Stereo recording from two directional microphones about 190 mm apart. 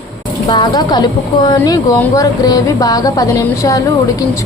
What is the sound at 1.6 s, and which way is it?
Speech, 10° left (ahead or behind).